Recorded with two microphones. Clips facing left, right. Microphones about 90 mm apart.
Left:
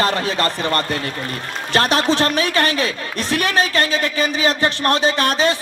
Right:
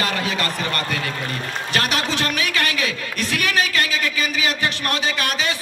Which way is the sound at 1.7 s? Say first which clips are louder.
Left 7 dB; 35° left (ahead or behind).